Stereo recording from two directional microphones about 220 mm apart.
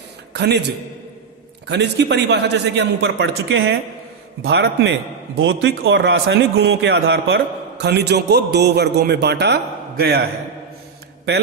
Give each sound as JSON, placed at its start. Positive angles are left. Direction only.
{"t": 0.3, "sound": "a man's voice", "side_deg": -50}
{"t": 1.6, "sound": "a man's voice", "side_deg": -50}